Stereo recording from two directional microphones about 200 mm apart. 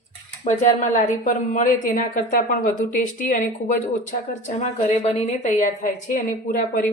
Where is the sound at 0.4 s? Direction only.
40° left (ahead or behind).